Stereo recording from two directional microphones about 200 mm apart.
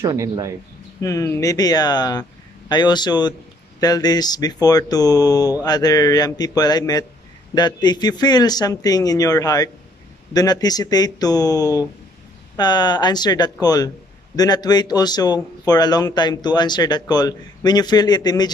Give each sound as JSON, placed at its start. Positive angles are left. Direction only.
{"t": 0.0, "sound": "speech", "side_deg": -15}
{"t": 1.0, "sound": "speech", "side_deg": 15}